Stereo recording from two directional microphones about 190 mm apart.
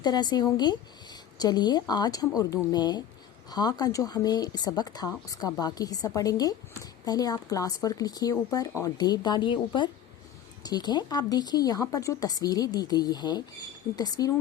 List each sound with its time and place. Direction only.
0.0 s speech: 20° left (ahead or behind)